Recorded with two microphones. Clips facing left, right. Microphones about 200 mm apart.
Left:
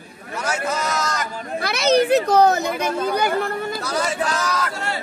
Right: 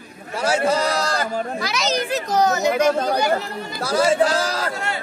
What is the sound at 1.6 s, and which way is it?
A child's voice, 55° left (ahead or behind).